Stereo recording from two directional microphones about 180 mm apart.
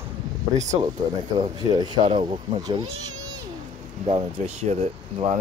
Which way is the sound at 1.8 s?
25° right (ahead or behind).